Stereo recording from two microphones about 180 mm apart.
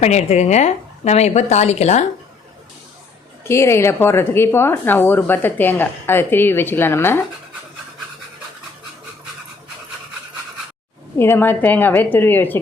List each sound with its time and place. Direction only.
0.0 s a woman's voice: 40° left (ahead or behind)
3.4 s a woman's voice: 15° left (ahead or behind)
11.2 s a woman's voice: 10° left (ahead or behind)